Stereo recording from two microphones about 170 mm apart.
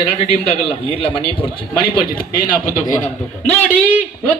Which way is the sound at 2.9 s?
45° left (ahead or behind).